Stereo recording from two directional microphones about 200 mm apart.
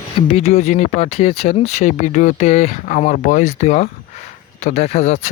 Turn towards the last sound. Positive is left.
turn(degrees=35)  # may be behind; listen again after turning